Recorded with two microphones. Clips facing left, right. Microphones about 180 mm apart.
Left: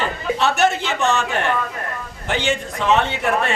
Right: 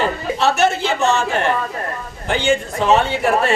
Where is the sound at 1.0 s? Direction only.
35° right (ahead or behind).